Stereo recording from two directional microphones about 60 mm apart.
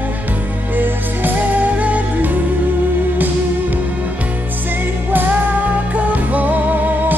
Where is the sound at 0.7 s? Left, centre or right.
Right.